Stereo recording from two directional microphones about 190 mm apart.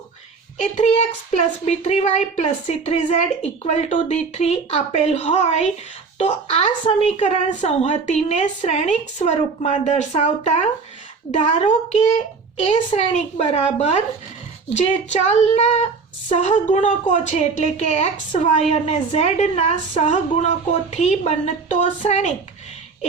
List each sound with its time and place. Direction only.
0.6 s a woman's voice: 35° left (ahead or behind)